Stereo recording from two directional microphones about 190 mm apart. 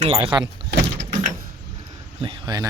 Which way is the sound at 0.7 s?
60° right (ahead or behind).